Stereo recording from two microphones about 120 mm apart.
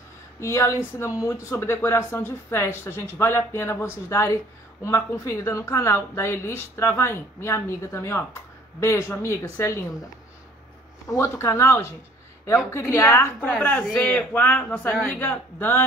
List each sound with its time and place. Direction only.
0.4 s speech: 20° left (ahead or behind)
11.1 s speech: 20° left (ahead or behind)